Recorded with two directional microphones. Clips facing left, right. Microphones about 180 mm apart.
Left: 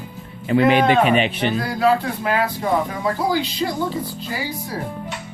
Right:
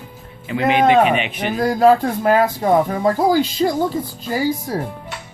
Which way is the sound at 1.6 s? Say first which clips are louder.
Right 8 dB; 45° right (ahead or behind).